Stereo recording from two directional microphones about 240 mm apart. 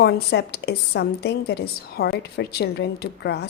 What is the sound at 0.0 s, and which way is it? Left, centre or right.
A woman's voice, left.